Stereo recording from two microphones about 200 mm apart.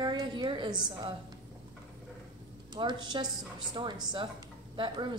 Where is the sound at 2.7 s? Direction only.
20° right (ahead or behind).